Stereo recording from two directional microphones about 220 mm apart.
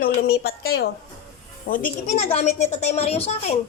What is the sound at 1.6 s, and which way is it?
A woman's voice, 40° left (ahead or behind).